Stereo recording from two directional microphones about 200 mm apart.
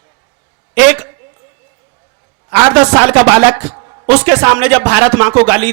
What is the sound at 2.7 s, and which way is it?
A man's voice, 5° right (ahead or behind).